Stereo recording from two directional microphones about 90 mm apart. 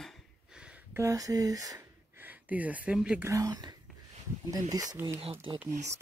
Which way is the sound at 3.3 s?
45° right (ahead or behind).